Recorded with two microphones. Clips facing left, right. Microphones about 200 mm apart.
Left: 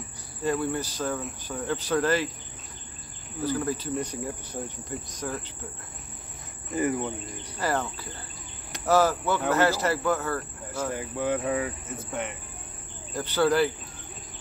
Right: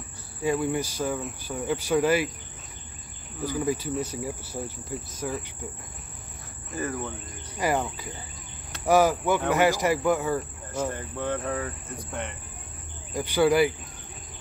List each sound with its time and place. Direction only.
0.4 s speech: 10° right (ahead or behind)
3.4 s speech: 10° right (ahead or behind)
3.9 s cricket: 5° right (ahead or behind)
6.7 s cricket: 20° left (ahead or behind)
7.5 s speech: 15° right (ahead or behind)
10.9 s speech: 10° left (ahead or behind)
13.1 s speech: 10° right (ahead or behind)